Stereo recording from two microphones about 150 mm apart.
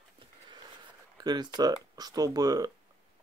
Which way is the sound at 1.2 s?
30° right (ahead or behind).